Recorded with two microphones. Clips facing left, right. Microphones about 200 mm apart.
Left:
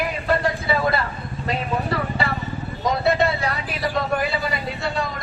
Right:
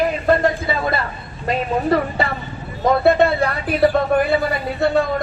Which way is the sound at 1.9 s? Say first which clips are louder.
Right 6 dB; 45° right (ahead or behind).